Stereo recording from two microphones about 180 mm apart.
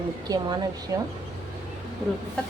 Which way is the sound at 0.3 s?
20° right (ahead or behind).